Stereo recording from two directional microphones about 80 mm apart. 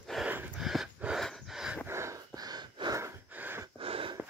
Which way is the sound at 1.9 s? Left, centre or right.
Right.